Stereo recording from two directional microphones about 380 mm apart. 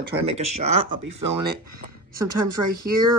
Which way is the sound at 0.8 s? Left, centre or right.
Right.